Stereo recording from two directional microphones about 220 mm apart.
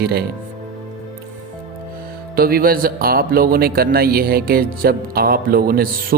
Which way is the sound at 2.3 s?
40° right (ahead or behind).